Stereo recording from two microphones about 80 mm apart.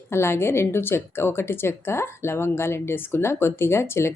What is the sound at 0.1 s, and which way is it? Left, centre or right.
Speech, left.